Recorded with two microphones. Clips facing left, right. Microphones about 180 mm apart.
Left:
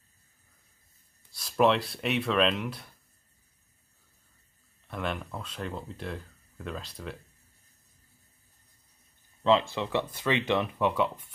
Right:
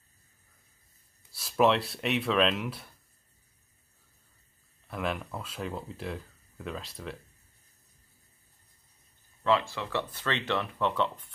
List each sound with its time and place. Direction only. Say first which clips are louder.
1.3 s speech: even; centre (ahead or behind)
4.8 s speech: right 1 dB; centre (ahead or behind)
9.4 s speech: left 3 dB; 20° left (ahead or behind)